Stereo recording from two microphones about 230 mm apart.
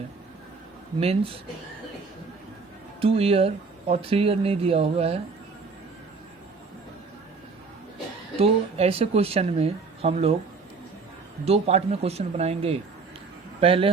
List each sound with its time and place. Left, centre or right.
0.9 s speech: right
3.0 s speech: right
8.4 s speech: right
11.4 s speech: right